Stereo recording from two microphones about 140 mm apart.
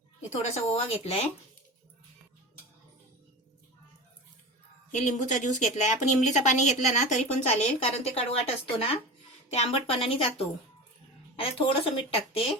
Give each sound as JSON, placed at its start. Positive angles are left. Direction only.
{"t": 0.4, "sound": "a woman's voice", "side_deg": 50}
{"t": 4.9, "sound": "a woman's voice", "side_deg": 60}